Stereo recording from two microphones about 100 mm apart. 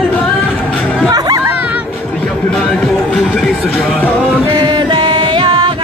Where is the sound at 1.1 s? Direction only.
40° right (ahead or behind).